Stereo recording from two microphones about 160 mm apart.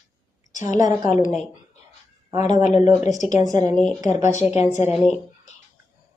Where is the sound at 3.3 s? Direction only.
20° right (ahead or behind).